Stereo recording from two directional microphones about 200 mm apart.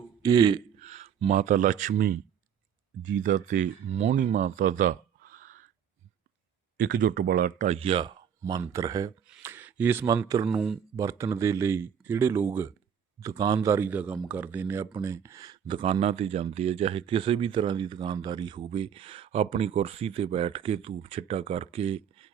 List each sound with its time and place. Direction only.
0.2 s speech: 20° right (ahead or behind)
0.8 s speech: 35° right (ahead or behind)
3.2 s speech: 40° right (ahead or behind)
6.7 s speech: 45° right (ahead or behind); by 10.5 s 15° right (ahead or behind)
10.5 s speech: centre (ahead or behind)
10.9 s speech: 15° right (ahead or behind)